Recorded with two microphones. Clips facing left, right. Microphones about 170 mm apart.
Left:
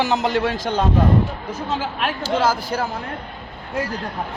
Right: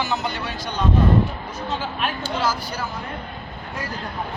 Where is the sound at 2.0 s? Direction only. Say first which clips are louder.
Left 2 dB; 90° left.